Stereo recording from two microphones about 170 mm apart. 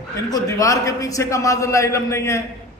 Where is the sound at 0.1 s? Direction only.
20° left (ahead or behind).